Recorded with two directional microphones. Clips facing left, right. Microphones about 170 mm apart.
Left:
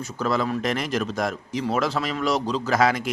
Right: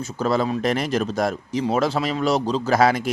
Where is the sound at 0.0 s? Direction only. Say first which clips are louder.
Right 3 dB; 30° right (ahead or behind).